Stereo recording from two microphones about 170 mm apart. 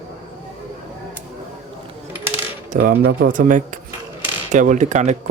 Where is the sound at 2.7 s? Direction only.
60° right (ahead or behind).